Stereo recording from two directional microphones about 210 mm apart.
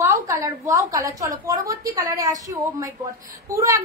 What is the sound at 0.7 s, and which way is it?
A woman's voice, 15° right (ahead or behind).